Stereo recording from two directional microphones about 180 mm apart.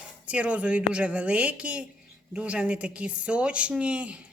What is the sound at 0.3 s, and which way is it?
Speech, 5° right (ahead or behind).